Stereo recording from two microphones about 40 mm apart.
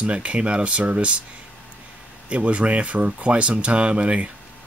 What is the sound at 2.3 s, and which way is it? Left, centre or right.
Speech, right.